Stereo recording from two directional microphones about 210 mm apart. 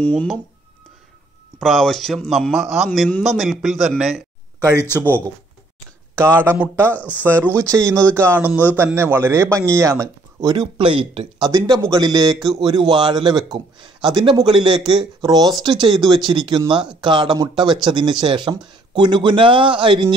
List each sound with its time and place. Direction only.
0.1 s a man's voice: centre (ahead or behind)
1.6 s a man's voice: centre (ahead or behind)
4.7 s speech: 10° left (ahead or behind)
6.4 s a man's voice: 10° right (ahead or behind)
6.9 s speech: 10° left (ahead or behind)
7.7 s a man's voice: 15° right (ahead or behind)
8.0 s a man's voice: 5° left (ahead or behind)
8.3 s a man's voice: 10° right (ahead or behind)